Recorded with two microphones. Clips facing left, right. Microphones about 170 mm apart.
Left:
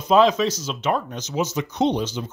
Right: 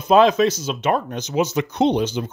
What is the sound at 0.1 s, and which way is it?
Speech, 60° right (ahead or behind).